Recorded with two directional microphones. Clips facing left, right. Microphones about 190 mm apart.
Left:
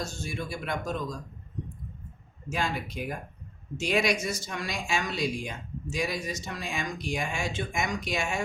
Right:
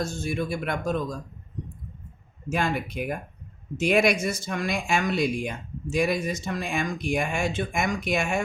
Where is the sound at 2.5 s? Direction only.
55° right (ahead or behind).